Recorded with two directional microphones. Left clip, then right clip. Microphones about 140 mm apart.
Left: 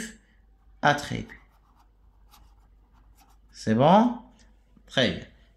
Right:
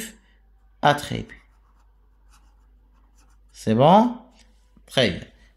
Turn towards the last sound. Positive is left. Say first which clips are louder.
# right 4 dB
turn(degrees=-40)  # may be behind; listen again after turning